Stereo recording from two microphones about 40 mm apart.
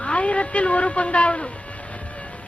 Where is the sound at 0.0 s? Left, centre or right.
Left.